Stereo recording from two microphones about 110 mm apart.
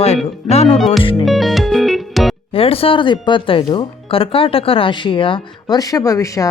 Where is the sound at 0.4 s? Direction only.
70° left (ahead or behind).